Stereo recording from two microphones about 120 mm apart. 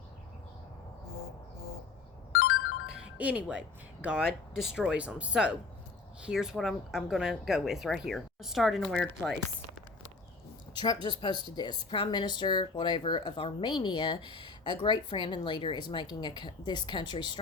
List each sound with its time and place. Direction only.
2.9 s music: 10° right (ahead or behind)
4.0 s speech: 5° right (ahead or behind)
10.8 s speech: 40° left (ahead or behind)